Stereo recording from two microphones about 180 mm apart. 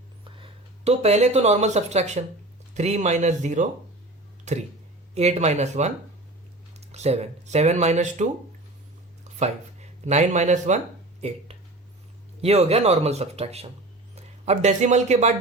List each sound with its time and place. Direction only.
0.3 s speech: 30° right (ahead or behind)
10.0 s speech: 40° right (ahead or behind)